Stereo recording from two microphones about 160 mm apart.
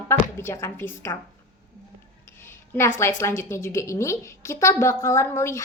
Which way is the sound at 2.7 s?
15° left (ahead or behind).